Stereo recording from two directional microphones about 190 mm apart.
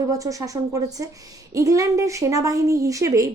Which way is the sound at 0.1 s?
15° right (ahead or behind).